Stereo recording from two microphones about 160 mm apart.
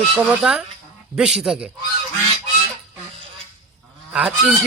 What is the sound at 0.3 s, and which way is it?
Speech, 5° right (ahead or behind).